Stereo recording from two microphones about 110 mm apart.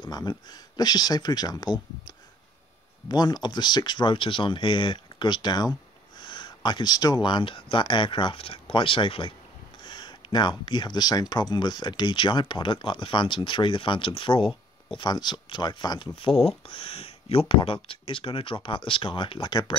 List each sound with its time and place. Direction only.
0.0 s speech: 40° left (ahead or behind)